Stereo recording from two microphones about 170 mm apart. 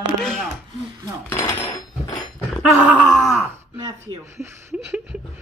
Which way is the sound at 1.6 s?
25° left (ahead or behind).